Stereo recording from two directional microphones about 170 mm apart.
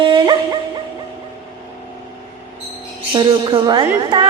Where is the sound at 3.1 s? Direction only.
25° right (ahead or behind).